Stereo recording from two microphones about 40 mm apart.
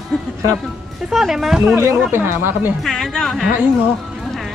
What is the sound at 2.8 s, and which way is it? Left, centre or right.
Speech, centre.